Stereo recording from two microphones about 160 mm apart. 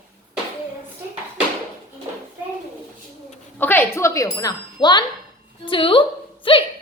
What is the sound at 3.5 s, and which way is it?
A woman's voice, 10° left (ahead or behind).